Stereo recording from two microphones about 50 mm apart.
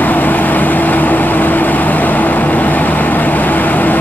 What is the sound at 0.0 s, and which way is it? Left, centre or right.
Vehicle, left.